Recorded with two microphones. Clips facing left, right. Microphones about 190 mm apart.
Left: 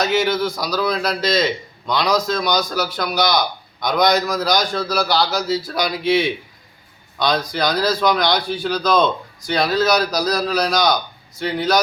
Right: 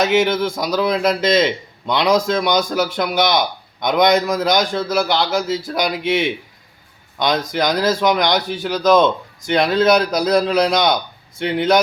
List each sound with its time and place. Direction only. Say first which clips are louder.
0.1 s a man's voice: right 2 dB; 20° right (ahead or behind)